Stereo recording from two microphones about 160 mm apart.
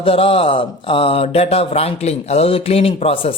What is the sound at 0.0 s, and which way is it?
Speech, 35° left (ahead or behind).